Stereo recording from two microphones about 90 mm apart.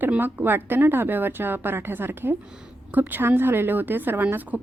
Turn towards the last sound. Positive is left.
turn(degrees=-20)  # may be behind; listen again after turning